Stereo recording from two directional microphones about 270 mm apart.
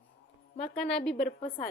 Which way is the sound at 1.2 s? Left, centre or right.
Left.